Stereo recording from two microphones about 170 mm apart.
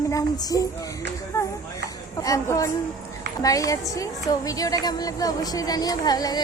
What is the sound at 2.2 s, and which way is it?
A woman's voice, 20° left (ahead or behind).